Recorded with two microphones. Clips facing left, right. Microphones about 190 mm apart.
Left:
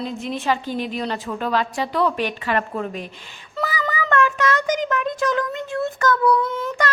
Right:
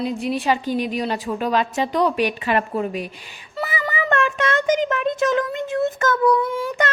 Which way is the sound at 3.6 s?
25° right (ahead or behind).